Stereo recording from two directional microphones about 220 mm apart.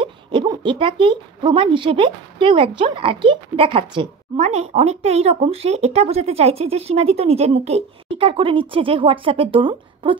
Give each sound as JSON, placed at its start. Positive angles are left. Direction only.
{"t": 0.0, "sound": "speech", "side_deg": -20}